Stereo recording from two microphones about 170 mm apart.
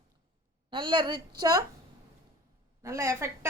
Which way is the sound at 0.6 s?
30° right (ahead or behind).